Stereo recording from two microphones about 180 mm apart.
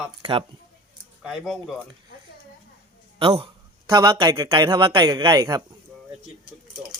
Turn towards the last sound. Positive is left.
turn(degrees=-20)  # may be behind; listen again after turning